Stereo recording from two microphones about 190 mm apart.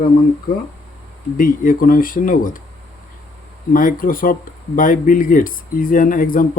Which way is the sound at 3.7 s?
45° left (ahead or behind).